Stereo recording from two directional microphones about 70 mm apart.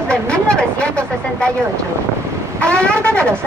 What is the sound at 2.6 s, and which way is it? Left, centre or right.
Speech, centre.